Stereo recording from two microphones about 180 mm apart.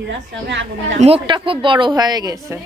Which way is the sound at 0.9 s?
35° right (ahead or behind).